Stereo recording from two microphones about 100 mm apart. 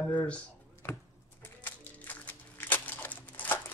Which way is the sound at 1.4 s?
15° left (ahead or behind).